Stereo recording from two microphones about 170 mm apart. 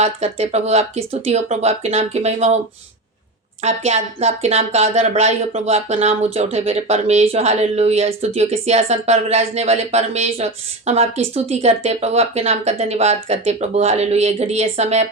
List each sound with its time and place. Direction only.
0.0 s speech: 40° right (ahead or behind)
3.6 s speech: 40° right (ahead or behind)